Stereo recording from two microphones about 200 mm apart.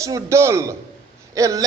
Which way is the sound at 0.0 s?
15° right (ahead or behind).